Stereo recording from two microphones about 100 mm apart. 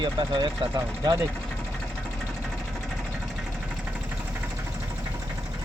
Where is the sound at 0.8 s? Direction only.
35° right (ahead or behind).